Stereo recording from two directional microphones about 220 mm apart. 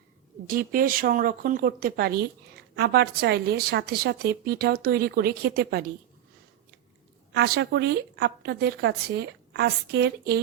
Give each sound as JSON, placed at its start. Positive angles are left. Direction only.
{"t": 0.4, "sound": "a woman's voice", "side_deg": -40}
{"t": 7.3, "sound": "a woman's voice", "side_deg": -45}